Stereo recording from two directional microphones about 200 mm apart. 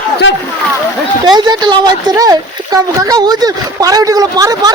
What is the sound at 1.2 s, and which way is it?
Speech, 20° right (ahead or behind).